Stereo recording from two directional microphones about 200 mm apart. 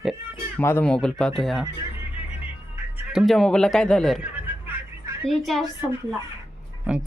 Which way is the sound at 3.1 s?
Centre (ahead or behind).